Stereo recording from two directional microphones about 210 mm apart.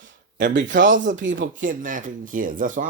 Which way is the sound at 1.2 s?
60° right (ahead or behind).